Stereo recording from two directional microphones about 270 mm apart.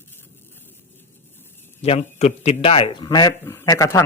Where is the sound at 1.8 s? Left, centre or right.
Left.